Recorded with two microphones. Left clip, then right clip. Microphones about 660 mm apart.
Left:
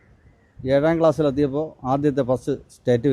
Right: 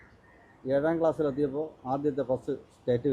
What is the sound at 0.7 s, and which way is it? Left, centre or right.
Speech, left.